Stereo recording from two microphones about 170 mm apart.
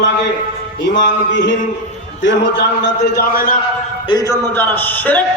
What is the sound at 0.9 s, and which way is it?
Speech, 90° left.